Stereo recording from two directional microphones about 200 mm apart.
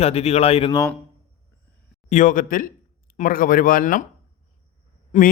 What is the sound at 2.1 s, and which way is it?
Speech, 40° left (ahead or behind).